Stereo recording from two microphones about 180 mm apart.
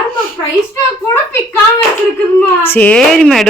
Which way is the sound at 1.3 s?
10° left (ahead or behind).